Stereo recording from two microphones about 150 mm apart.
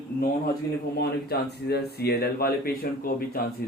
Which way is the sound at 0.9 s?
90° left.